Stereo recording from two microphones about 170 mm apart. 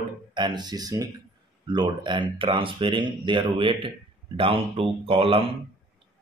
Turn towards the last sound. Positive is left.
turn(degrees=-30)  # may be behind; listen again after turning